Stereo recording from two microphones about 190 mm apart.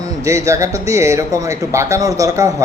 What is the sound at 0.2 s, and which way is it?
Speech, 15° right (ahead or behind).